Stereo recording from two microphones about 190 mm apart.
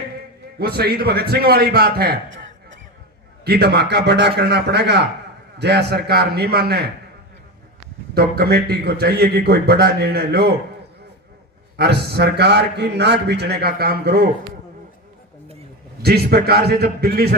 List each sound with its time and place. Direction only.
0.6 s a man's voice: 55° right (ahead or behind)
8.1 s a man's voice: 55° right (ahead or behind)
11.8 s a man's voice: 60° right (ahead or behind)
16.0 s a man's voice: 55° right (ahead or behind)